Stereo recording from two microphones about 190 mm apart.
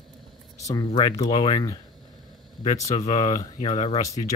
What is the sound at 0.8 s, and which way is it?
Speech, 30° left (ahead or behind).